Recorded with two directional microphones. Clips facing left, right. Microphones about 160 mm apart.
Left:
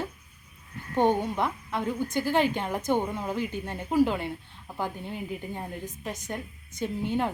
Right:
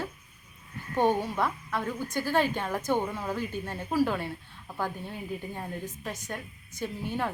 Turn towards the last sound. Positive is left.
turn(degrees=20)  # may be behind; listen again after turning